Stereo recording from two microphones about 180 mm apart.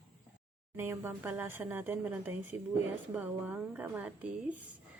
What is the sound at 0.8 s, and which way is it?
Speech, 10° right (ahead or behind).